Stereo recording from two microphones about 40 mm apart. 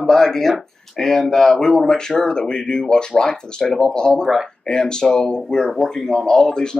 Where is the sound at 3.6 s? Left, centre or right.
Centre.